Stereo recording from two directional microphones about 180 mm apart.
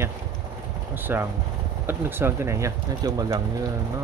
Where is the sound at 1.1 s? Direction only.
10° right (ahead or behind).